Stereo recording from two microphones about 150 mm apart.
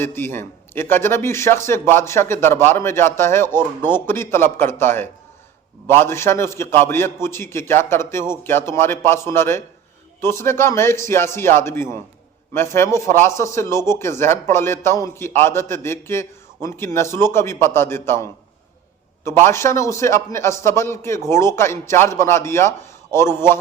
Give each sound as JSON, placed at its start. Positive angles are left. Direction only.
{"t": 0.0, "sound": "speech", "side_deg": 15}
{"t": 19.5, "sound": "speech", "side_deg": 20}